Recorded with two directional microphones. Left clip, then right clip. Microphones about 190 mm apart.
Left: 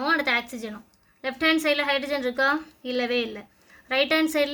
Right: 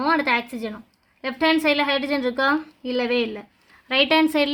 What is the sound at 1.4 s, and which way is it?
A woman's voice, 55° right (ahead or behind).